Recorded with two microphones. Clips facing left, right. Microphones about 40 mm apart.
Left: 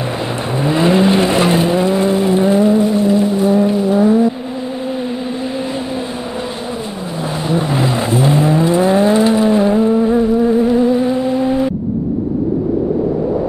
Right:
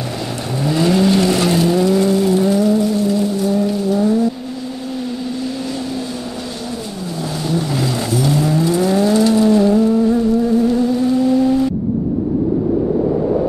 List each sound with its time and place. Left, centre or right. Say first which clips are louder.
0.0 s vehicle: left 4 dB; left
7.2 s vehicle: left 3 dB; left